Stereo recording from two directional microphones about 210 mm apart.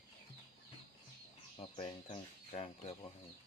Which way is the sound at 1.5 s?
30° left (ahead or behind).